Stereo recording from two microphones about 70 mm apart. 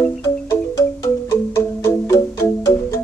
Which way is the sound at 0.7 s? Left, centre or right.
Left.